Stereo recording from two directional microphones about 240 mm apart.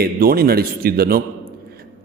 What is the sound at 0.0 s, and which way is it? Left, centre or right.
A man's voice, right.